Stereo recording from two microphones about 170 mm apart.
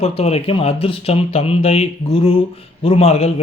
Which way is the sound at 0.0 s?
35° left (ahead or behind).